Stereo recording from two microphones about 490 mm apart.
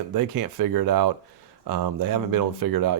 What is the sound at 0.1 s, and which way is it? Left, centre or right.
Speech, right.